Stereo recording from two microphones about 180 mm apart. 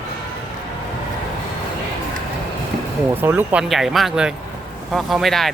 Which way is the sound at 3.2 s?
10° right (ahead or behind).